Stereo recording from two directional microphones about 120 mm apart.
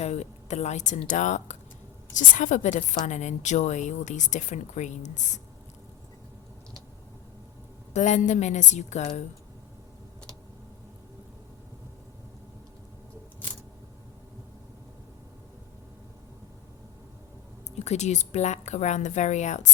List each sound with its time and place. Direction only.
0.0 s a woman's voice: 65° left (ahead or behind); by 5.4 s 85° left
7.9 s a woman's voice: 90° left; by 9.2 s 75° left (ahead or behind)
17.7 s a woman's voice: 70° left (ahead or behind)